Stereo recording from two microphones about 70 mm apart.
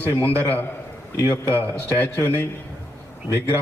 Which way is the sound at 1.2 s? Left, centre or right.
Left.